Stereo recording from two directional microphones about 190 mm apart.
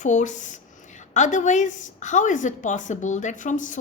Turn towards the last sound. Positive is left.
turn(degrees=40)  # may be behind; listen again after turning